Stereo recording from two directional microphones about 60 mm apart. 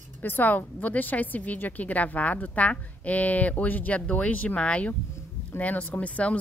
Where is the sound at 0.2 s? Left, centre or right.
Left.